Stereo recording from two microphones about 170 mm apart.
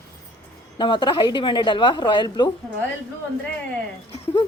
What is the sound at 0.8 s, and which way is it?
A woman's voice, 25° left (ahead or behind).